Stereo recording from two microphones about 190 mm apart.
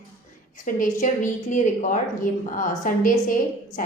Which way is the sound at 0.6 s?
45° left (ahead or behind).